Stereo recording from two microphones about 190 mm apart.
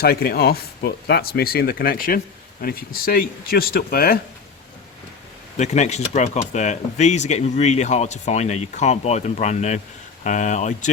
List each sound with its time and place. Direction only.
0.0 s speech: 55° left (ahead or behind)
5.5 s speech: 40° left (ahead or behind)